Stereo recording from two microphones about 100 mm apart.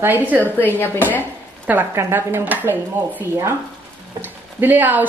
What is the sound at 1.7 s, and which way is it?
Speech, 20° right (ahead or behind).